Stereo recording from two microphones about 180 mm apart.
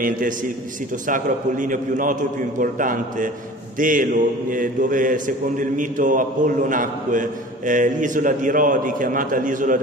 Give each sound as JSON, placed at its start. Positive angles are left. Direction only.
{"t": 1.0, "sound": "a man's voice", "side_deg": -45}